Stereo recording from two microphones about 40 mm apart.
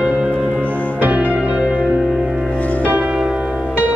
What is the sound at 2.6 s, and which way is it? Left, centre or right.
Music, left.